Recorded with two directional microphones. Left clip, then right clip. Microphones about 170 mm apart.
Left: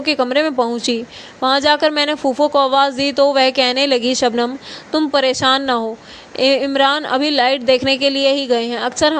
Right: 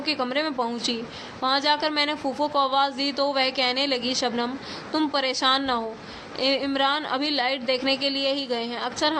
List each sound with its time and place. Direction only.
0.0 s a woman's voice: 50° left (ahead or behind)